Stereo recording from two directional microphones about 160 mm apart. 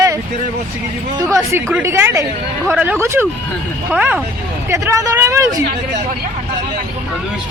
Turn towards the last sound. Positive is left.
turn(degrees=-20)  # may be behind; listen again after turning